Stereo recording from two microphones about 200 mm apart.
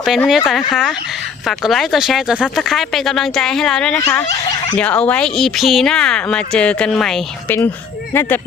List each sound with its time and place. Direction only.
0.0 s speech: centre (ahead or behind)
3.9 s a child's voice: 15° left (ahead or behind)